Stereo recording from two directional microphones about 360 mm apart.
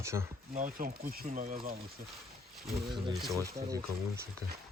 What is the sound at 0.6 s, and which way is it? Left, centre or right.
Speech, right.